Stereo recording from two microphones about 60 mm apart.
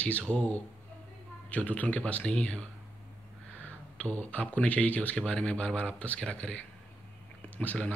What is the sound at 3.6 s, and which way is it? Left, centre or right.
Speech, left.